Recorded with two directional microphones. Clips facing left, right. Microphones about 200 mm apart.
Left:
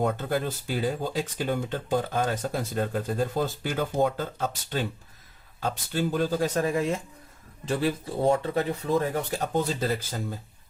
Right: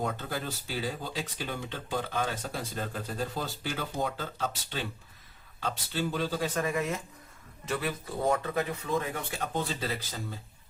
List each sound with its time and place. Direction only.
0.0 s speech: 50° left (ahead or behind)